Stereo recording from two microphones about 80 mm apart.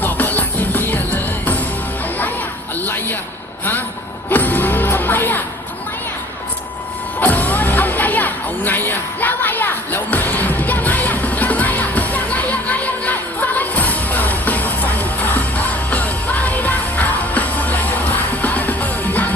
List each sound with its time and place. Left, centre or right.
0.0 s music: left
2.8 s a sound: left
4.3 s music: left
7.2 s music: left